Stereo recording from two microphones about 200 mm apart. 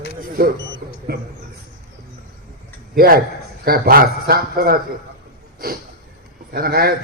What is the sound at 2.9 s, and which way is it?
A man's voice, 50° right (ahead or behind).